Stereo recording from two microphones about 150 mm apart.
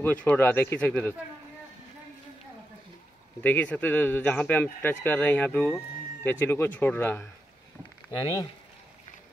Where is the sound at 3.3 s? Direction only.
10° left (ahead or behind).